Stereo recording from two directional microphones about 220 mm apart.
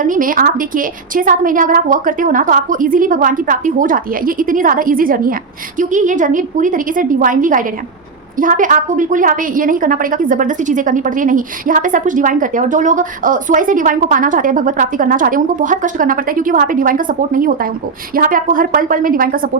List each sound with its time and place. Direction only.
0.0 s a woman's voice: 40° right (ahead or behind)